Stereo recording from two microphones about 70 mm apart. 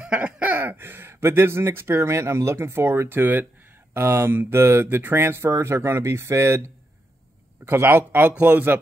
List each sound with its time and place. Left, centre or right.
0.0 s speech: centre